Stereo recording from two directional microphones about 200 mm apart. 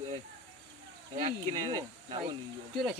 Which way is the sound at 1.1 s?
20° right (ahead or behind).